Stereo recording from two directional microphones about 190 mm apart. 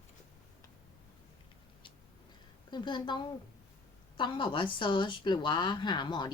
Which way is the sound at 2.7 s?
25° left (ahead or behind).